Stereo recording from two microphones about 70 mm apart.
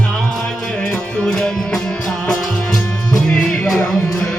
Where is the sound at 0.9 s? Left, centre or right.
Centre.